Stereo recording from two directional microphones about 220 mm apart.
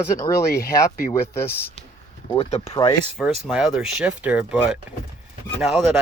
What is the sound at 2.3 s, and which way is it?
Speech, 25° left (ahead or behind).